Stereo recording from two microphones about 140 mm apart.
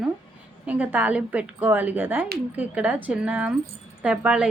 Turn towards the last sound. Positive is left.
turn(degrees=-5)  # may be behind; listen again after turning